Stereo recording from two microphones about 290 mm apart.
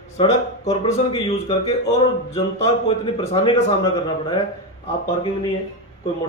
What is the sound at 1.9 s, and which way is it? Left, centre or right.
A man's voice, left.